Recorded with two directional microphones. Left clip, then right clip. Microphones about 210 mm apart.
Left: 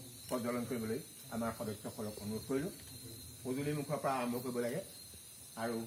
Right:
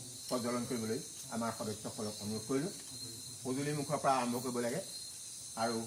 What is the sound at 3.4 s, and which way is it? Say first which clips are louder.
Speech: right 1 dB; centre (ahead or behind).